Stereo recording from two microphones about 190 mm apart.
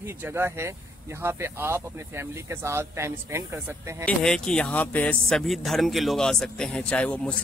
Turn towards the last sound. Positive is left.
turn(degrees=5)  # may be behind; listen again after turning